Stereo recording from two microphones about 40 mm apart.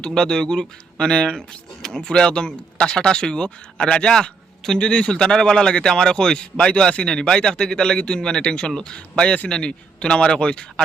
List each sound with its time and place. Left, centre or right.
0.0 s speech: centre